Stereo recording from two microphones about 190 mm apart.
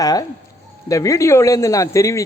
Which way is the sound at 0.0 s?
20° left (ahead or behind).